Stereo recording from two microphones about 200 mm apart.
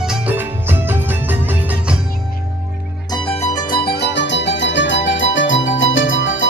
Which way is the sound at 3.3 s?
30° left (ahead or behind).